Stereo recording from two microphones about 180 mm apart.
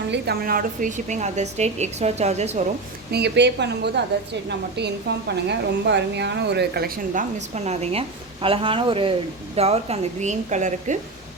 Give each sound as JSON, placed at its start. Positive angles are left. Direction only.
{"t": 0.1, "sound": "a woman's voice", "side_deg": -60}
{"t": 3.1, "sound": "a woman's voice", "side_deg": -70}